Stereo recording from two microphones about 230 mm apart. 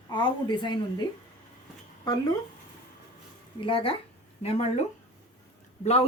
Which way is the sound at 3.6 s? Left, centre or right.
Left.